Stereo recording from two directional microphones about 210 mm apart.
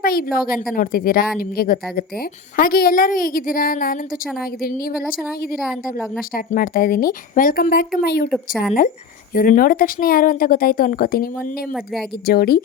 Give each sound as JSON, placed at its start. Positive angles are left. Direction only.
{"t": 0.0, "sound": "a sound", "side_deg": 45}
{"t": 0.3, "sound": "a woman's voice", "side_deg": 45}
{"t": 5.5, "sound": "a woman's voice", "side_deg": 0}
{"t": 6.3, "sound": "a woman's voice", "side_deg": 45}
{"t": 8.3, "sound": "a woman's voice", "side_deg": 0}
{"t": 9.3, "sound": "a woman's voice", "side_deg": 40}